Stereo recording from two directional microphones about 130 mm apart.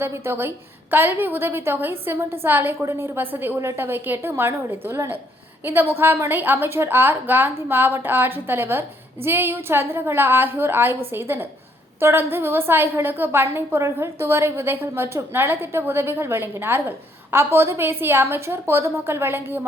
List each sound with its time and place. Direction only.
0.0 s a woman's voice: 20° right (ahead or behind)